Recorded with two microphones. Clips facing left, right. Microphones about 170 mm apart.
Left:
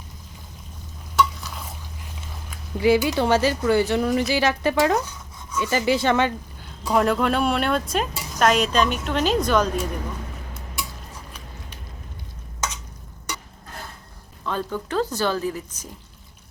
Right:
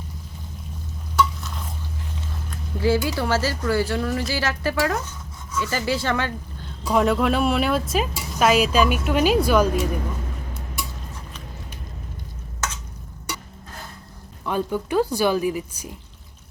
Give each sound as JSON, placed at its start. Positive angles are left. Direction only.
{"t": 1.4, "sound": "stir", "side_deg": 0}
{"t": 2.5, "sound": "speech", "side_deg": 15}
{"t": 6.9, "sound": "speech", "side_deg": 0}
{"t": 14.4, "sound": "speech", "side_deg": -15}